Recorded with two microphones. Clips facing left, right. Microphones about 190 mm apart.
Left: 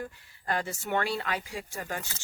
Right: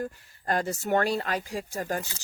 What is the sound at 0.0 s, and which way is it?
Speech, 45° right (ahead or behind).